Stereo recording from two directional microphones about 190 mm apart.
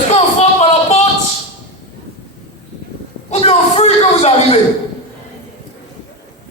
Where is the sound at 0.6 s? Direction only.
35° left (ahead or behind).